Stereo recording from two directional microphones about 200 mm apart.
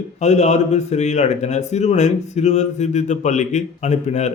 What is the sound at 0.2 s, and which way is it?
A man's voice, 35° left (ahead or behind).